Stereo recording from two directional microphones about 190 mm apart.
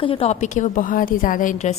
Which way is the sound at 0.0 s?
30° left (ahead or behind).